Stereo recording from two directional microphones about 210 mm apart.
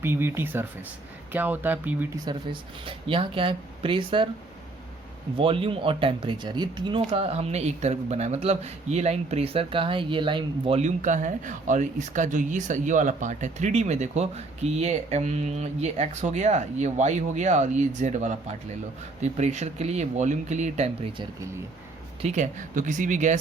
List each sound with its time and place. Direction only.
0.0 s speech: 10° right (ahead or behind)
5.4 s speech: 25° right (ahead or behind)